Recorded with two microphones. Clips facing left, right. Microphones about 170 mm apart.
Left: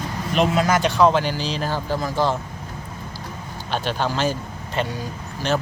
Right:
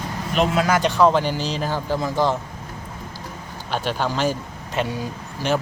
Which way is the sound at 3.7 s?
10° right (ahead or behind).